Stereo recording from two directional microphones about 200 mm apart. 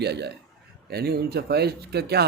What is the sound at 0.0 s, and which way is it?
A man's voice, 55° right (ahead or behind).